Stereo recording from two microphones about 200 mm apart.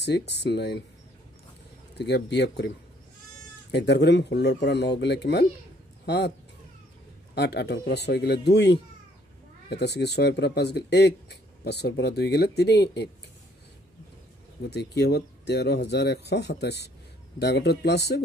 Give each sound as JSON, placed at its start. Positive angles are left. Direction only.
{"t": 0.3, "sound": "speech", "side_deg": 60}
{"t": 2.0, "sound": "speech", "side_deg": 60}
{"t": 3.7, "sound": "speech", "side_deg": 60}
{"t": 7.3, "sound": "speech", "side_deg": 55}
{"t": 14.7, "sound": "speech", "side_deg": 55}